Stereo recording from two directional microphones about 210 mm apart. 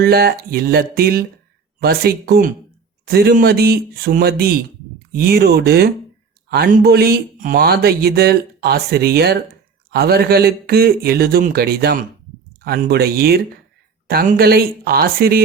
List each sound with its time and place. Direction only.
0.0 s speech: 50° right (ahead or behind)